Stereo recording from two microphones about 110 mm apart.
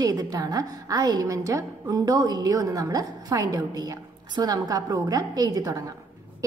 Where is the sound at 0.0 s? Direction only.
35° right (ahead or behind).